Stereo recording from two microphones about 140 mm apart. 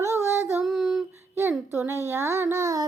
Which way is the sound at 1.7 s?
20° right (ahead or behind).